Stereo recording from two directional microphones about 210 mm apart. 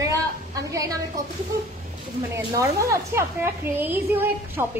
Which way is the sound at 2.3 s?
15° right (ahead or behind).